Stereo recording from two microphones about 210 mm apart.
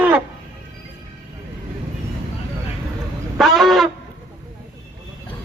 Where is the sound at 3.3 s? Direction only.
Centre (ahead or behind).